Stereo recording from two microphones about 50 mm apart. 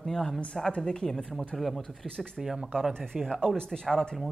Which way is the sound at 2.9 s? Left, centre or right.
Centre.